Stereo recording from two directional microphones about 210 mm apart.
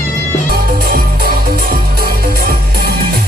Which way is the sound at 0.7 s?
45° right (ahead or behind).